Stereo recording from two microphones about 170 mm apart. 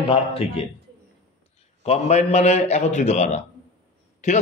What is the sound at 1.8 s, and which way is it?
A man's voice, 40° left (ahead or behind).